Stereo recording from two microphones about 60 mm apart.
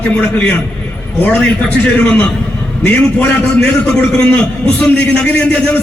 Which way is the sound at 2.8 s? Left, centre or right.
Left.